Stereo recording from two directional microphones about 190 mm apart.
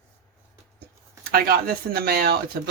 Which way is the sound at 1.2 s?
50° right (ahead or behind).